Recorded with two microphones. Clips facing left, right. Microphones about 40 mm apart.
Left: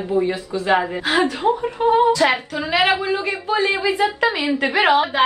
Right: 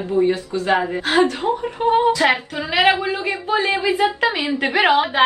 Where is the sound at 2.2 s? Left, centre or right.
Centre.